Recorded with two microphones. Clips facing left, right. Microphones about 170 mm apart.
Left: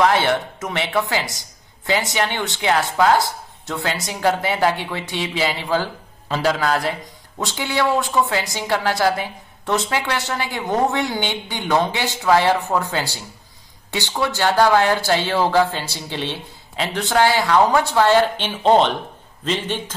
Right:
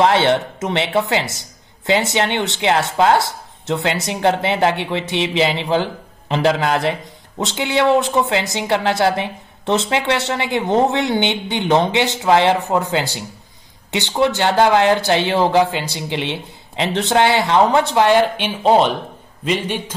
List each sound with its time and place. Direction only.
0.0 s a man's voice: 25° right (ahead or behind)